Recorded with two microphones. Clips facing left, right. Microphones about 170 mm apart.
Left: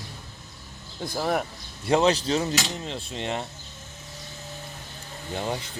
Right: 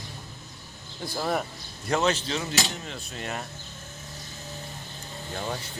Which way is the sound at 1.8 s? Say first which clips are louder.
Left 4 dB; 30° left (ahead or behind).